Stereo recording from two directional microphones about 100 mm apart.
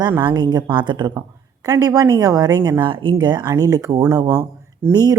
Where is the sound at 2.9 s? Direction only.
55° right (ahead or behind).